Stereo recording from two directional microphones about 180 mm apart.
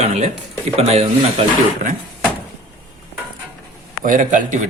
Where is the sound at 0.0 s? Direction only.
35° right (ahead or behind).